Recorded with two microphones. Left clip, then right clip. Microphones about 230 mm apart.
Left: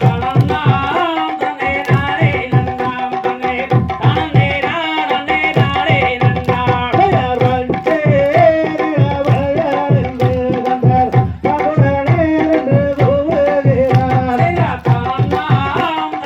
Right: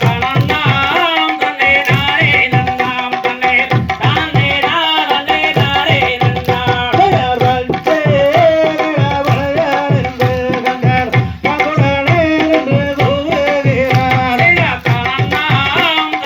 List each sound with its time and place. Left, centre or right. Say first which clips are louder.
7.9 s music: right 2 dB; right